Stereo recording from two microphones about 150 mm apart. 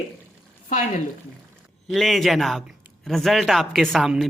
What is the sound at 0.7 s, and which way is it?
Speech, 60° left (ahead or behind).